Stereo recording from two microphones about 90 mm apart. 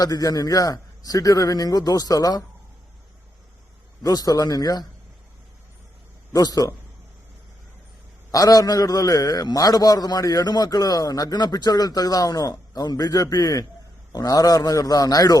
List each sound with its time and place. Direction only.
0.0 s a man's voice: 40° left (ahead or behind)
4.0 s a man's voice: 45° left (ahead or behind)
6.3 s a man's voice: 45° left (ahead or behind)
8.3 s a man's voice: 40° left (ahead or behind)